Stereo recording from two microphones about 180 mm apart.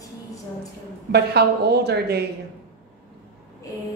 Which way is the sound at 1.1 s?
65° right (ahead or behind).